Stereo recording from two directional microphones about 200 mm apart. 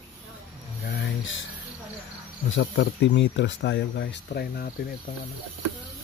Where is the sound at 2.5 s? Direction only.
65° left (ahead or behind); by 4.7 s 50° left (ahead or behind).